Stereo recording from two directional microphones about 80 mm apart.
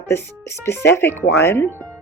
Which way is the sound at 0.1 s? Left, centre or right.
Left.